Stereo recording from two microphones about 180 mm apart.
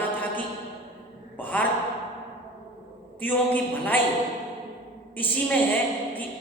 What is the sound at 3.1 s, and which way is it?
Speech, 10° left (ahead or behind).